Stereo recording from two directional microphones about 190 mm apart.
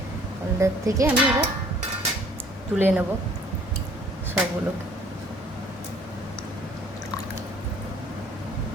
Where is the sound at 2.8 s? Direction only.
10° right (ahead or behind).